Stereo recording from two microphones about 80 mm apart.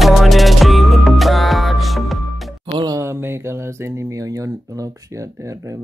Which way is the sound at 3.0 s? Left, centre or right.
Right.